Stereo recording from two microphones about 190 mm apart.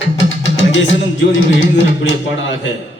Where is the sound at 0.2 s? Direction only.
80° left.